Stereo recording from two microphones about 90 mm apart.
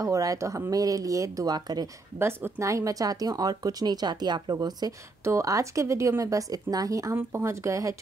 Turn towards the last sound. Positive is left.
turn(degrees=-35)  # may be behind; listen again after turning